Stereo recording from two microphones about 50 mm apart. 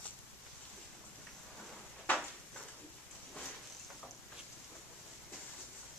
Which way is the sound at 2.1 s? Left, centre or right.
Left.